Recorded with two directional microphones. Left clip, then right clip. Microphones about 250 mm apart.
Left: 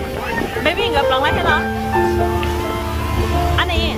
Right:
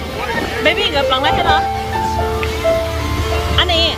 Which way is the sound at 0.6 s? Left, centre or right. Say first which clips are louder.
Right 2 dB; centre.